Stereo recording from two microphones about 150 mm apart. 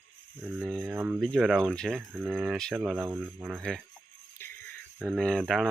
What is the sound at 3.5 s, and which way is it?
Speech, centre (ahead or behind).